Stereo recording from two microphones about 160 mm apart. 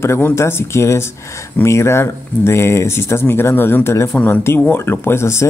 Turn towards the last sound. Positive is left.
turn(degrees=15)  # may be behind; listen again after turning